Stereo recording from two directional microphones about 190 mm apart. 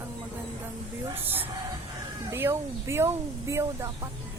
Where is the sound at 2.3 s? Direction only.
15° right (ahead or behind).